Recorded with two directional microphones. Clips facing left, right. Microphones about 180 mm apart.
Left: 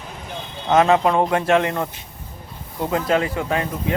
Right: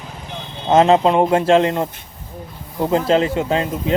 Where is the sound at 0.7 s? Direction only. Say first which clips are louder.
Right 3 dB; 25° right (ahead or behind).